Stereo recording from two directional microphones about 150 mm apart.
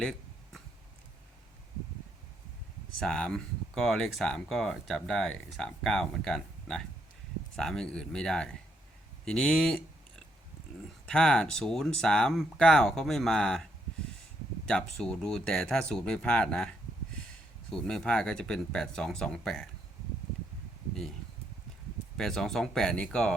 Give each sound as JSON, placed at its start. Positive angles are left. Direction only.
{"t": 0.0, "sound": "a sound", "side_deg": 5}
{"t": 3.0, "sound": "speech", "side_deg": 5}
{"t": 9.2, "sound": "a sound", "side_deg": 5}
{"t": 11.0, "sound": "speech", "side_deg": 5}
{"t": 14.7, "sound": "speech", "side_deg": 5}
{"t": 22.2, "sound": "speech", "side_deg": 5}